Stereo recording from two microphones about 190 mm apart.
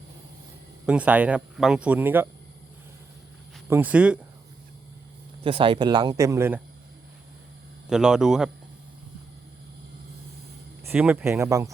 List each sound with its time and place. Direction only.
0.9 s speech: 5° right (ahead or behind)
3.7 s speech: 10° right (ahead or behind)
5.4 s speech: 30° right (ahead or behind)
7.9 s speech: 5° right (ahead or behind)
10.8 s speech: 10° right (ahead or behind)